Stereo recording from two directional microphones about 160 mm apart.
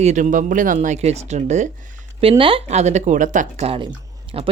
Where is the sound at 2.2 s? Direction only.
35° right (ahead or behind).